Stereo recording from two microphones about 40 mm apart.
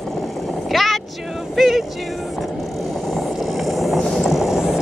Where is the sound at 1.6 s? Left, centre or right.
Centre.